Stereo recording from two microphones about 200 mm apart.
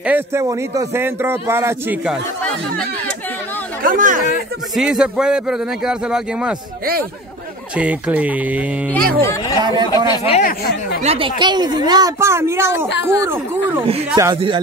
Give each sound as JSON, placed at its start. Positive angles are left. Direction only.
{"t": 0.0, "sound": "a man's voice", "side_deg": -10}
{"t": 3.8, "sound": "speech", "side_deg": -45}
{"t": 4.7, "sound": "speech", "side_deg": -5}
{"t": 7.7, "sound": "a man's voice", "side_deg": -5}
{"t": 9.2, "sound": "speech", "side_deg": 15}
{"t": 9.6, "sound": "speech", "side_deg": -20}
{"t": 10.0, "sound": "speech", "side_deg": 25}
{"t": 11.0, "sound": "a man's voice", "side_deg": -30}